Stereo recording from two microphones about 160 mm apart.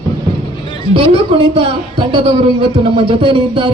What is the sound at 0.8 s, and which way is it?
Speech, 35° right (ahead or behind).